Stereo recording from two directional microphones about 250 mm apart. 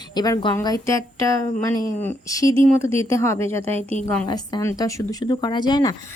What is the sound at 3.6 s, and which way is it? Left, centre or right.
Speech, right.